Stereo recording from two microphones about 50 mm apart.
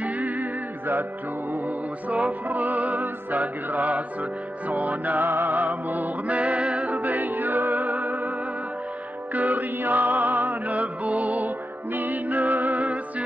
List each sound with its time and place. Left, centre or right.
0.0 s music: right
2.0 s music: right
9.3 s music: right